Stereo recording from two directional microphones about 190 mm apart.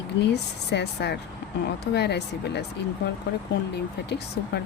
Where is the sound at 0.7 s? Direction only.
60° left (ahead or behind).